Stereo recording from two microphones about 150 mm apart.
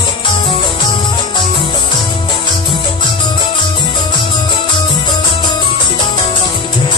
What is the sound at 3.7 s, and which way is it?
Music, 30° left (ahead or behind).